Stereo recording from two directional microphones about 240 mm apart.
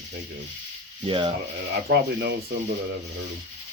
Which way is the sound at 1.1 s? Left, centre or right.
Right.